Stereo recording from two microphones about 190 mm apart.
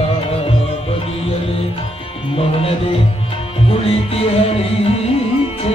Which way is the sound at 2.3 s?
30° left (ahead or behind).